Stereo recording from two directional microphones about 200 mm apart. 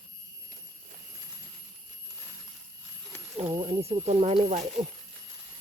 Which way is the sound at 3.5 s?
25° right (ahead or behind).